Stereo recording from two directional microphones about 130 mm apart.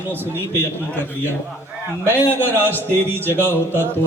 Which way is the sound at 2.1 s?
15° left (ahead or behind).